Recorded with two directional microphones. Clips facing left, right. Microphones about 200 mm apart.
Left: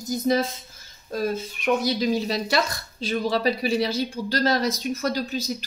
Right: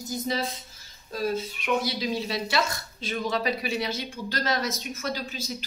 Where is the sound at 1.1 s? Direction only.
45° left (ahead or behind).